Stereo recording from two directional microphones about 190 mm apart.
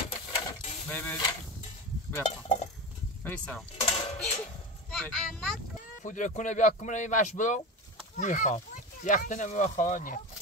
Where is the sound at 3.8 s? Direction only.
35° left (ahead or behind).